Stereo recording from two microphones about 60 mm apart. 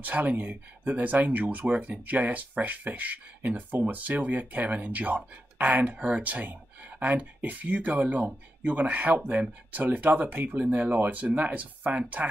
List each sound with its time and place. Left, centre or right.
0.0 s speech: right